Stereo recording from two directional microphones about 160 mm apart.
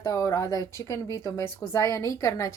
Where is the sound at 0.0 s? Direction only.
20° left (ahead or behind).